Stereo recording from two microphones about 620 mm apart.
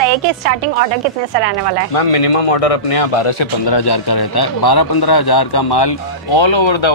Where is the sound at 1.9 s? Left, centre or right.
Left.